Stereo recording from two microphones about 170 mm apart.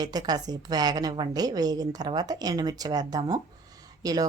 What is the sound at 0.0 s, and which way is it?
A woman's voice, 25° right (ahead or behind).